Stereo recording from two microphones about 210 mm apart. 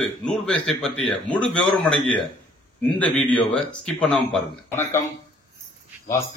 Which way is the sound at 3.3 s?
5° left (ahead or behind).